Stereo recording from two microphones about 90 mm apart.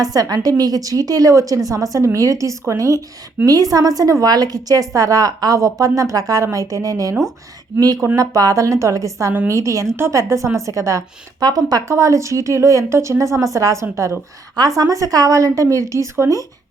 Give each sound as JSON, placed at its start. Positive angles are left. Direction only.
{"t": 0.0, "sound": "a woman's voice", "side_deg": -45}
{"t": 11.4, "sound": "speech", "side_deg": -45}
{"t": 11.9, "sound": "a woman's voice", "side_deg": -35}
{"t": 14.5, "sound": "a woman's voice", "side_deg": -45}